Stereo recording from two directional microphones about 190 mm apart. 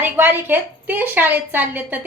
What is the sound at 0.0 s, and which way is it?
A woman's voice, 10° right (ahead or behind).